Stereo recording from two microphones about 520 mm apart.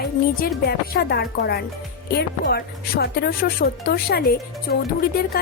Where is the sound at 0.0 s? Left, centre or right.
Centre.